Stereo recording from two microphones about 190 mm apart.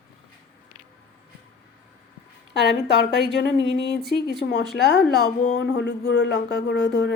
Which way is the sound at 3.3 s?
60° left (ahead or behind).